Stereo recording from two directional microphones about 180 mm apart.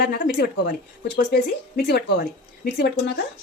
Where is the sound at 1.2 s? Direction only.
65° left (ahead or behind).